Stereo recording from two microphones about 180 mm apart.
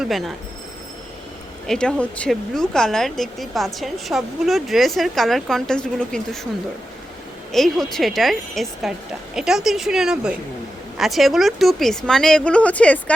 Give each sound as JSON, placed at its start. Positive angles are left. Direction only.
{"t": 0.0, "sound": "speech", "side_deg": 0}
{"t": 1.6, "sound": "speech", "side_deg": 5}
{"t": 7.5, "sound": "speech", "side_deg": 0}